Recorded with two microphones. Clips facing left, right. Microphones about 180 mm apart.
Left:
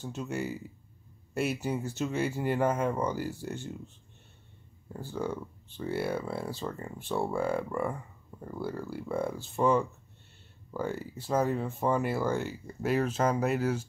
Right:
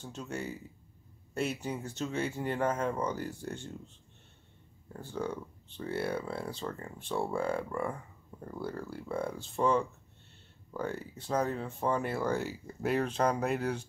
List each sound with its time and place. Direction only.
0.0 s speech: 5° left (ahead or behind)
4.9 s speech: 5° left (ahead or behind)